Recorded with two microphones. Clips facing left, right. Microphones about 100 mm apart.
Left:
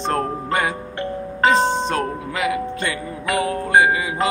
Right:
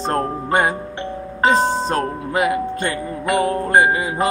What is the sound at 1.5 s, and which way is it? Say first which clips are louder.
Music: right 1 dB; centre (ahead or behind).